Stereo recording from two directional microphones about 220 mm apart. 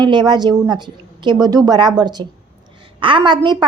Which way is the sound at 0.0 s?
20° right (ahead or behind).